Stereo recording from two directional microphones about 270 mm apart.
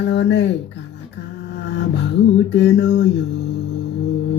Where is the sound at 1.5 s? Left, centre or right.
Left.